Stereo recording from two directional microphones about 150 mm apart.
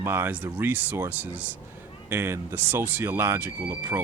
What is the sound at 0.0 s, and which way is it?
Speech, 15° right (ahead or behind).